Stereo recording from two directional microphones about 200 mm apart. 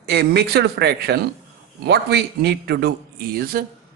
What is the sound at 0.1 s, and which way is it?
Speech, 55° right (ahead or behind).